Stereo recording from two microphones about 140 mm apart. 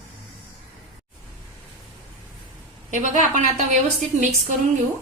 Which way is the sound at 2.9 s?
60° right (ahead or behind).